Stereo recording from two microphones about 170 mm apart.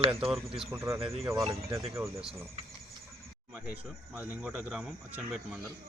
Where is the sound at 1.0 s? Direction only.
35° right (ahead or behind).